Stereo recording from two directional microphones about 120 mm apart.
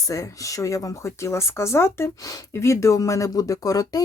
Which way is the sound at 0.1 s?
25° left (ahead or behind).